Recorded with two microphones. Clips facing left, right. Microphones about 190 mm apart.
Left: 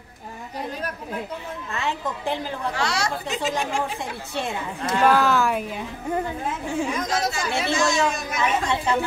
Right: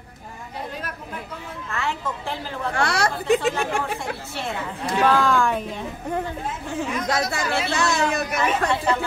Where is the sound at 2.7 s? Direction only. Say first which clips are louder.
Right 5 dB; 55° right (ahead or behind).